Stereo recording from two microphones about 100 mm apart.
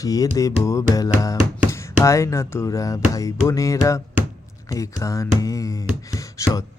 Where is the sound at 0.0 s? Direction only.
35° left (ahead or behind).